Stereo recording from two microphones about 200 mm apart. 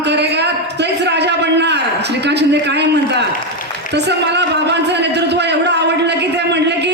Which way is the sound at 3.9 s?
60° right (ahead or behind).